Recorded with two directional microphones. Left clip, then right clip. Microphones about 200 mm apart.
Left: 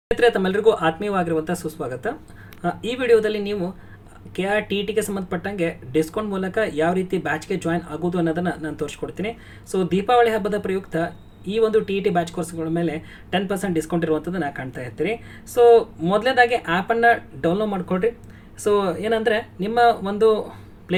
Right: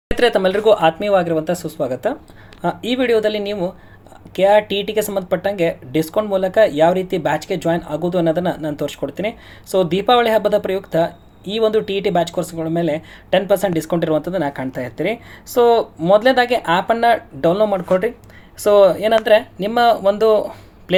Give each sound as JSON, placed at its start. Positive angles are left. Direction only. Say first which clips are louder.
{"t": 0.2, "sound": "speech", "louder": "right 5 dB", "side_deg": -15}